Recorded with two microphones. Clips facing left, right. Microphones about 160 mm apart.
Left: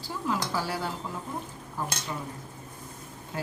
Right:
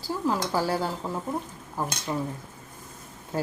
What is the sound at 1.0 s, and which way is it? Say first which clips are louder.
Speech: right 5 dB; 35° right (ahead or behind).